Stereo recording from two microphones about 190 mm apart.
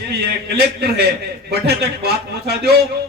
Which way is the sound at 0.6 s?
60° right (ahead or behind).